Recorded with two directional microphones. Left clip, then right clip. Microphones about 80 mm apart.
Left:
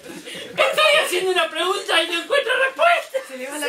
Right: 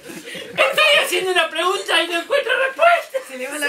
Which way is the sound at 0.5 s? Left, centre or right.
Centre.